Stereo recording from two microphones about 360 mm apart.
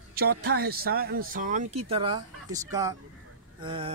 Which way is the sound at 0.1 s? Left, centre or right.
Right.